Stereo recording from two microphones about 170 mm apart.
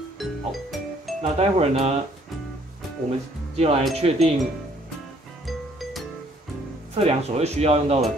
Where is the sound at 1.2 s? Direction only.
40° right (ahead or behind).